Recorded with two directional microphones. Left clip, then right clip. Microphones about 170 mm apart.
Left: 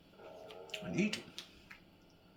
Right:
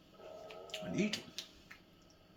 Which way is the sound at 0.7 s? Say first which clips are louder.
Left 1 dB; 45° left (ahead or behind).